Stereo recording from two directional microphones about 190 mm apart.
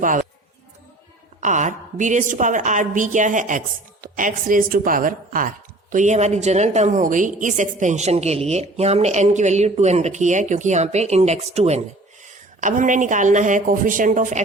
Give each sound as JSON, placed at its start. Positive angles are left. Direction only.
{"t": 0.0, "sound": "a man's voice", "side_deg": -45}
{"t": 1.4, "sound": "a woman's voice", "side_deg": -40}